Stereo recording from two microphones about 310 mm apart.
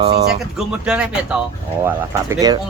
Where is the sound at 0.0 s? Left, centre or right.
Centre.